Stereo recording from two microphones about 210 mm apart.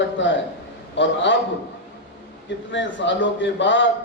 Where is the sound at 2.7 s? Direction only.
60° left (ahead or behind).